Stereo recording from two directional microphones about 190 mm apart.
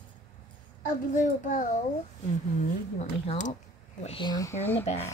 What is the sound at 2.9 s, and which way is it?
Speech, 40° left (ahead or behind).